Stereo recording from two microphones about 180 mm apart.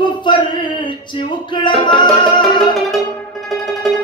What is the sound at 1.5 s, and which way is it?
Music, 25° left (ahead or behind).